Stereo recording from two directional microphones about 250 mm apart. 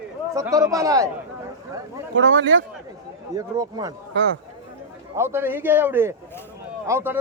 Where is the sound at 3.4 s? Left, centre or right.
Centre.